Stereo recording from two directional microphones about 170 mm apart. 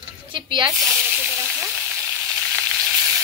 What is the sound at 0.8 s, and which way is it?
Frying, centre (ahead or behind).